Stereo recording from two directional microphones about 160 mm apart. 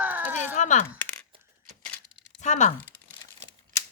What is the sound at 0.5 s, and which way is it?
Speech, 50° left (ahead or behind).